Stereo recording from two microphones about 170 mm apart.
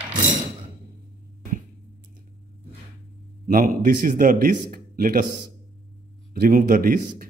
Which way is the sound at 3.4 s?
55° right (ahead or behind).